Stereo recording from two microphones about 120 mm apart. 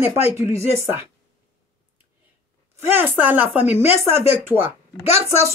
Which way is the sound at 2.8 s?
15° right (ahead or behind).